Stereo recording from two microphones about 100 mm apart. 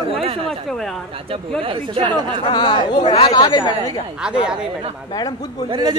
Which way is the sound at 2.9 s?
70° left (ahead or behind).